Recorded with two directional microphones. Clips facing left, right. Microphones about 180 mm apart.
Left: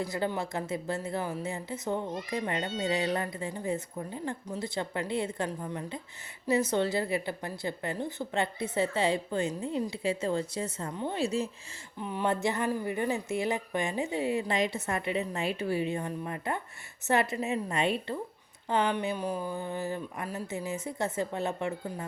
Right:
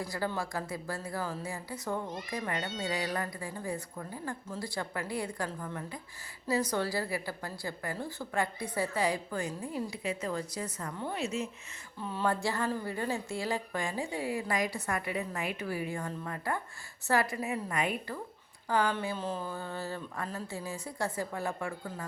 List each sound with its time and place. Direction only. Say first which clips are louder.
0.0 s a woman's voice: left 3 dB; 20° left (ahead or behind)
11.2 s speech: left 5 dB; 35° left (ahead or behind)
11.9 s a woman's voice: left 2 dB; 15° left (ahead or behind)